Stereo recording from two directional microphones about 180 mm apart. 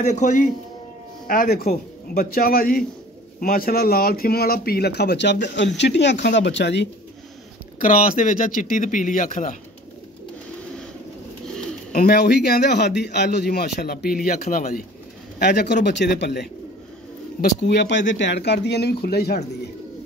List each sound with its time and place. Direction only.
0.0 s speech: 40° left (ahead or behind)
1.2 s speech: 55° left (ahead or behind); by 6.9 s 75° left (ahead or behind)
7.8 s speech: 50° left (ahead or behind)
11.9 s speech: 55° left (ahead or behind)
15.3 s speech: 65° left (ahead or behind)